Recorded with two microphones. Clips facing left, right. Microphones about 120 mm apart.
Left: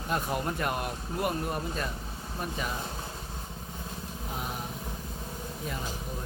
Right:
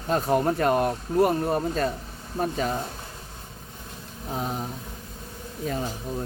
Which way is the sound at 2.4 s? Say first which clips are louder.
Right 9 dB; 45° right (ahead or behind).